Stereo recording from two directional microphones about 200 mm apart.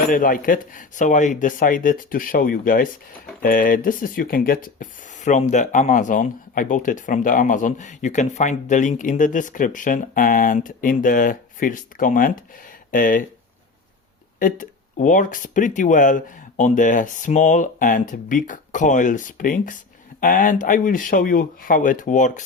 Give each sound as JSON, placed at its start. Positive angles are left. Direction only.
{"t": 0.1, "sound": "speech", "side_deg": 45}
{"t": 14.3, "sound": "speech", "side_deg": 40}